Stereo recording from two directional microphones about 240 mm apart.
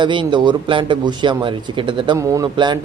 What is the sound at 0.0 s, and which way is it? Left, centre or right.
Speech, centre.